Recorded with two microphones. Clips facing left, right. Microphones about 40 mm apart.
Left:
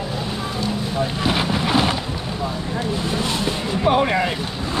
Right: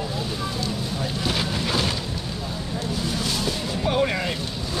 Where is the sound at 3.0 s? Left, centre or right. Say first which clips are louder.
Left 4 dB; left.